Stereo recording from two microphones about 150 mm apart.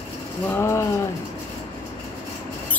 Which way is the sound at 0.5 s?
15° left (ahead or behind).